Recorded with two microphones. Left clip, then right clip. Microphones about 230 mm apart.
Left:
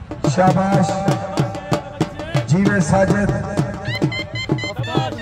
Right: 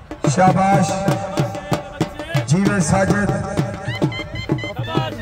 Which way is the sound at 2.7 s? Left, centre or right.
Right.